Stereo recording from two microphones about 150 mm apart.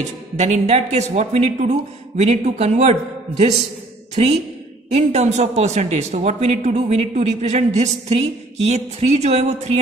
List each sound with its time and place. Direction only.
0.0 s a man's voice: 50° right (ahead or behind)